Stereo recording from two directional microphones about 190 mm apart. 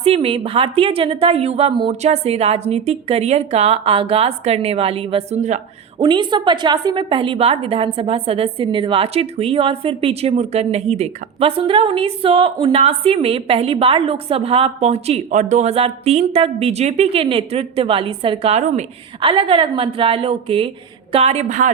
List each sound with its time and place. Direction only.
0.0 s a woman's voice: 30° right (ahead or behind)
6.0 s a woman's voice: 25° right (ahead or behind)